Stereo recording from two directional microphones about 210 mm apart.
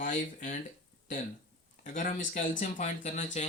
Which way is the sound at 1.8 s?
35° left (ahead or behind).